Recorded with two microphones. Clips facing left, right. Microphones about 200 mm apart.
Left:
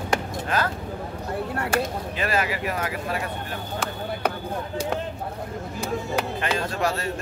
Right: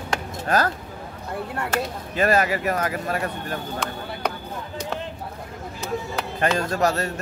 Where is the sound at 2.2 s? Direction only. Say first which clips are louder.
Right 6 dB; 45° right (ahead or behind).